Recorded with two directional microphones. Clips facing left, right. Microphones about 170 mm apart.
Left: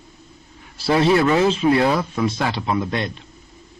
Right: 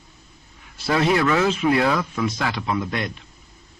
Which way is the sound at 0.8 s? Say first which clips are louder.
Left 3 dB; 30° left (ahead or behind).